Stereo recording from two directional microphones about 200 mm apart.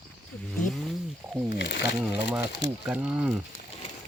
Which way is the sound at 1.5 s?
55° left (ahead or behind).